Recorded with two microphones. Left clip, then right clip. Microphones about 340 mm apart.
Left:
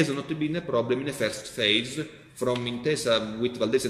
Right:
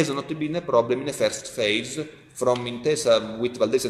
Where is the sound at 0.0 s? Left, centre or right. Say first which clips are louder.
Right 2 dB; centre.